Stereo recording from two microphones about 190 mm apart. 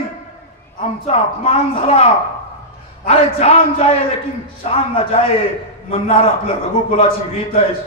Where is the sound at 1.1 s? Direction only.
30° left (ahead or behind).